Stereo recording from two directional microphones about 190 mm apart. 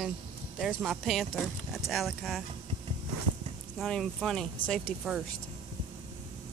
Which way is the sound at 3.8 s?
Centre (ahead or behind).